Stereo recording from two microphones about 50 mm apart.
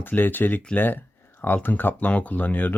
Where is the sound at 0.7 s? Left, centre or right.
Left.